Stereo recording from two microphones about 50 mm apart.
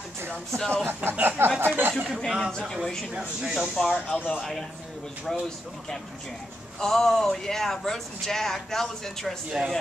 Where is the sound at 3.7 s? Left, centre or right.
Centre.